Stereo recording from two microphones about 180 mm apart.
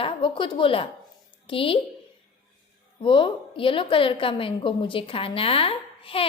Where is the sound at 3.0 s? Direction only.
30° left (ahead or behind).